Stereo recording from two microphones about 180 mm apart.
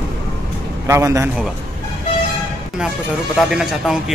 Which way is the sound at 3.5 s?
Centre (ahead or behind).